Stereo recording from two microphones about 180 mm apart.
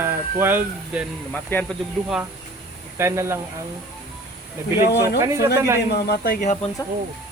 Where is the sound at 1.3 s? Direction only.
10° left (ahead or behind).